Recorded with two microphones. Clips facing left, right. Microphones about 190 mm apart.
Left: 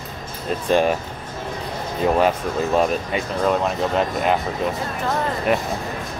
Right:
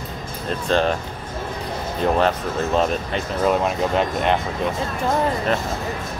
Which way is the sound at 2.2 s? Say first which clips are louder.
Left 1 dB; 10° left (ahead or behind).